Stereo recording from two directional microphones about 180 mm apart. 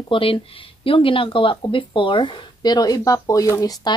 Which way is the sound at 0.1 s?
30° left (ahead or behind).